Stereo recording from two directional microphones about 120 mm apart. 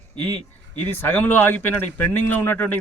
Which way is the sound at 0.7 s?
15° left (ahead or behind).